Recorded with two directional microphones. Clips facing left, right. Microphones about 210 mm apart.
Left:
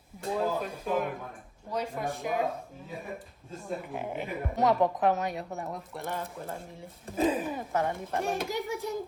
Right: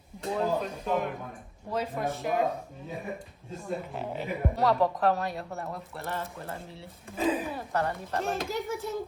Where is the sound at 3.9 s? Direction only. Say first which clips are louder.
Right 1 dB; 15° left (ahead or behind).